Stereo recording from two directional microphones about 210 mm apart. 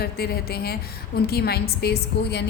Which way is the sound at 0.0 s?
50° left (ahead or behind).